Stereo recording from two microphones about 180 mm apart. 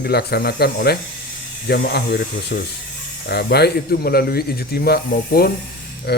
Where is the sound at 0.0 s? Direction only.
60° left (ahead or behind).